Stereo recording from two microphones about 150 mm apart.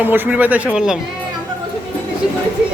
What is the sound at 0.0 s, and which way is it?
Speech, 10° right (ahead or behind).